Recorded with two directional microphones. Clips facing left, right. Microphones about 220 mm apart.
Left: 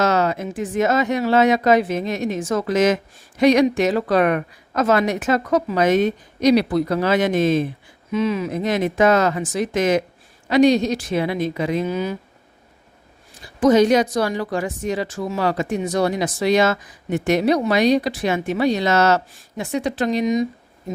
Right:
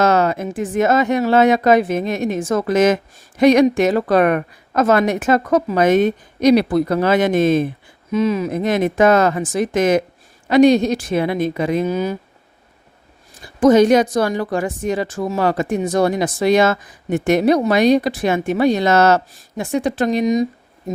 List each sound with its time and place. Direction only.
0.0 s speech: 50° right (ahead or behind)
13.6 s speech: 50° right (ahead or behind)